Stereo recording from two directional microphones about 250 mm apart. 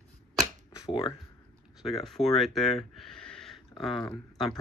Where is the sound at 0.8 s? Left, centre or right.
Centre.